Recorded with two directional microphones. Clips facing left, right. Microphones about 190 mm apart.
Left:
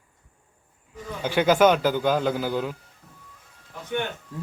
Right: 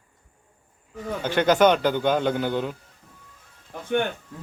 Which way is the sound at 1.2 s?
10° left (ahead or behind).